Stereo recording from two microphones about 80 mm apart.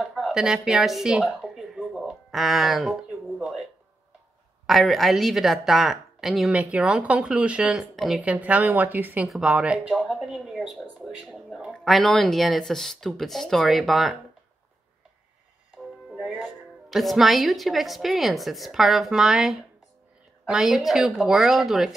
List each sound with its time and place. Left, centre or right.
0.0 s a sound: centre
4.6 s a woman's voice: centre
6.5 s speech: centre
7.9 s speech: centre
8.2 s a woman's voice: centre
10.1 s a sound: centre
11.8 s a woman's voice: centre
16.1 s music: centre
16.9 s a woman's voice: centre